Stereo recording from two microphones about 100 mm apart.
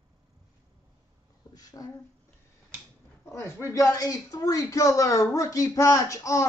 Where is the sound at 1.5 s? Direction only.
40° left (ahead or behind).